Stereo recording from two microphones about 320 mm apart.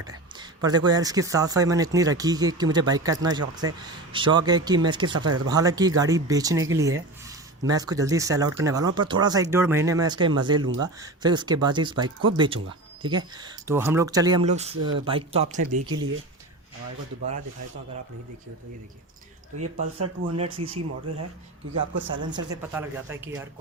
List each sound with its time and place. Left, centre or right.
0.1 s a sound: centre
0.9 s speech: centre
3.6 s speech: right
4.1 s speech: centre
14.8 s speech: right
15.0 s speech: centre
19.5 s speech: right
21.9 s speech: right
22.4 s speech: centre